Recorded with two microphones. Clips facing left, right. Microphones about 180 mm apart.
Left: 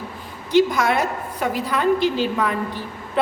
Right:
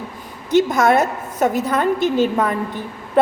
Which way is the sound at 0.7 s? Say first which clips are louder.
Right 5 dB; 45° right (ahead or behind).